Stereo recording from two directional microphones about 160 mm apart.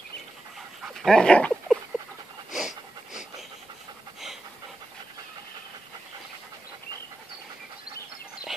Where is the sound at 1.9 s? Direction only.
5° right (ahead or behind).